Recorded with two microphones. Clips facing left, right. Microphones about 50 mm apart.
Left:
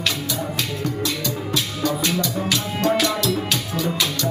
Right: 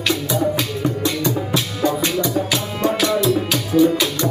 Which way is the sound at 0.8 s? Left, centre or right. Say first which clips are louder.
Right 4 dB; right.